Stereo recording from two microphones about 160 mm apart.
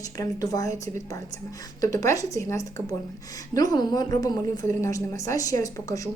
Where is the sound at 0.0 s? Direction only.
20° left (ahead or behind).